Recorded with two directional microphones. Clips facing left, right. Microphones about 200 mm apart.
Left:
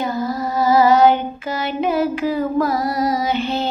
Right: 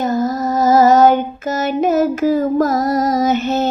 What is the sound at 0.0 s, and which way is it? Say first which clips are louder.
Child singing: right 5 dB; 45° right (ahead or behind).